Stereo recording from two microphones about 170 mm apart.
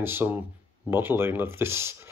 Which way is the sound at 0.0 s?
10° right (ahead or behind).